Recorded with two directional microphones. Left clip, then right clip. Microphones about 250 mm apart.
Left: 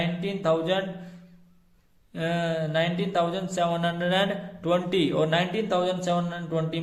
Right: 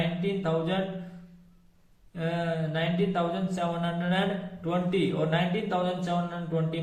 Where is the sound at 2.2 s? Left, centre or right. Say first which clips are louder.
Left 3 dB; left.